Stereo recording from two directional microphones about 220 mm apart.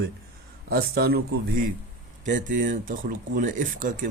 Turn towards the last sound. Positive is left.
turn(degrees=-40)  # may be behind; listen again after turning